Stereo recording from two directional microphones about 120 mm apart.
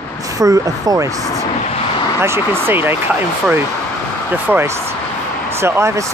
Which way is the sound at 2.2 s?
20° right (ahead or behind).